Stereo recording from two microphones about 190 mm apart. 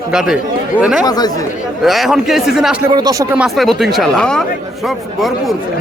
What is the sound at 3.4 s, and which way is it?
Speech, centre (ahead or behind).